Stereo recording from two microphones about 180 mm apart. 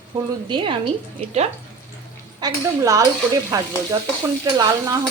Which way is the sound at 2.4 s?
20° right (ahead or behind).